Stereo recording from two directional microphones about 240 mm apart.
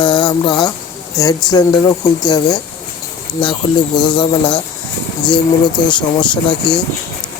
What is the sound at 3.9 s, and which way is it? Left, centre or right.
Speech, centre.